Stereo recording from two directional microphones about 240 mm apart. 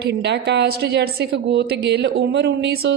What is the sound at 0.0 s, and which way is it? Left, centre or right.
A woman's voice, right.